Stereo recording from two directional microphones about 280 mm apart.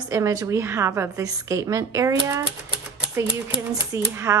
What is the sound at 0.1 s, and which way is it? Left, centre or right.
Speech, centre.